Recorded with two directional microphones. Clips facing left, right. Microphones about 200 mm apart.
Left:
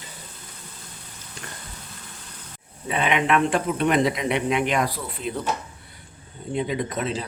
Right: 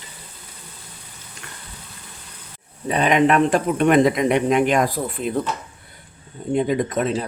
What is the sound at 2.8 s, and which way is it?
Speech, 40° right (ahead or behind).